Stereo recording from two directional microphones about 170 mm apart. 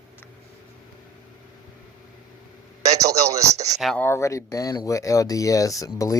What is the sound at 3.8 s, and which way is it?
Speech, centre (ahead or behind).